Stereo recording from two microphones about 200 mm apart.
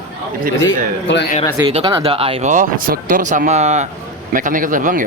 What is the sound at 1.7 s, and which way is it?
Speech, 25° right (ahead or behind).